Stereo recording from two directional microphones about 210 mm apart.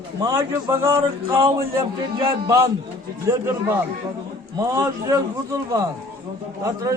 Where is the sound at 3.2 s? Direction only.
10° right (ahead or behind).